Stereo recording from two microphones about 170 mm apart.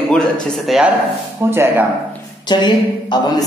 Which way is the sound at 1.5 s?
15° right (ahead or behind).